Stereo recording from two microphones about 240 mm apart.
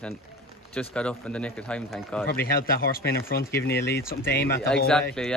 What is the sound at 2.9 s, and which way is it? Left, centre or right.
Speech, left.